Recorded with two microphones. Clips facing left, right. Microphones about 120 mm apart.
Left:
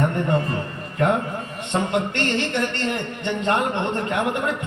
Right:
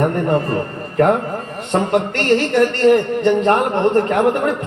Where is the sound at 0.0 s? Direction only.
40° right (ahead or behind).